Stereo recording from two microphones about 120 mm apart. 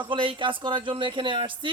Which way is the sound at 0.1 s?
45° right (ahead or behind).